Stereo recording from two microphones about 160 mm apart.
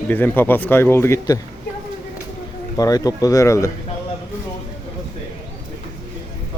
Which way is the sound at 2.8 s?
20° left (ahead or behind).